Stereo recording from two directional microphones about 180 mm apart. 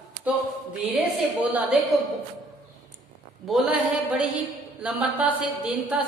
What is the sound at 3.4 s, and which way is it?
Speech, 5° right (ahead or behind).